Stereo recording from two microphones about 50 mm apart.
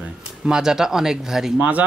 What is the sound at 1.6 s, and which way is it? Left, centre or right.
Speech, right.